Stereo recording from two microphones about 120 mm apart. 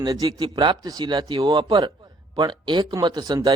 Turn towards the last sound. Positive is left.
turn(degrees=-35)  # may be behind; listen again after turning